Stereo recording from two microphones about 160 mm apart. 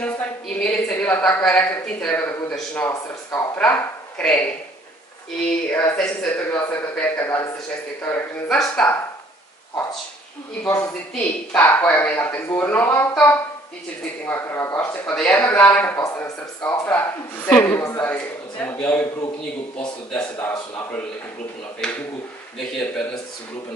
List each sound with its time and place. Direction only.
0.0 s a man's voice: 5° left (ahead or behind)
10.7 s a man's voice: 15° left (ahead or behind)
14.2 s a man's voice: 15° left (ahead or behind)
22.6 s a man's voice: 5° left (ahead or behind)